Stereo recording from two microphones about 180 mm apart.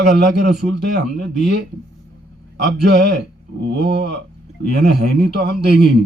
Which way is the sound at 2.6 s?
60° right (ahead or behind).